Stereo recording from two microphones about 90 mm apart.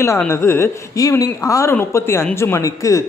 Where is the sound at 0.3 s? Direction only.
30° left (ahead or behind).